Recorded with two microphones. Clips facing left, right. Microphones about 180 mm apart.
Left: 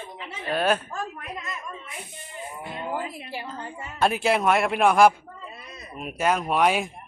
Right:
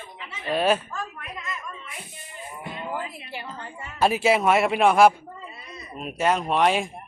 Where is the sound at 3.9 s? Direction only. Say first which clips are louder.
Right 2 dB; 5° right (ahead or behind).